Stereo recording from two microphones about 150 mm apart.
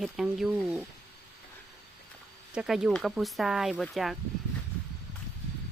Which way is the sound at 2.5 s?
5° right (ahead or behind).